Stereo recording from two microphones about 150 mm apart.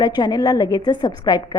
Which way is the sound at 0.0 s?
25° left (ahead or behind).